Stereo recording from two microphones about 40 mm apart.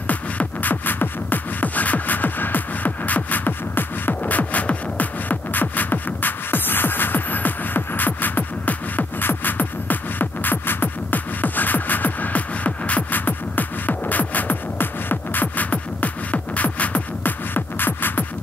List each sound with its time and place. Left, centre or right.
0.0 s music: left
4.1 s music: left